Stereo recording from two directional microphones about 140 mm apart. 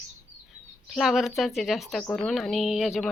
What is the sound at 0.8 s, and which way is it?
A woman's voice, centre (ahead or behind).